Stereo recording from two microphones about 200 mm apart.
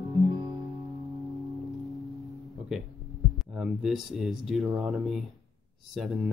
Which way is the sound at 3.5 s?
Centre (ahead or behind).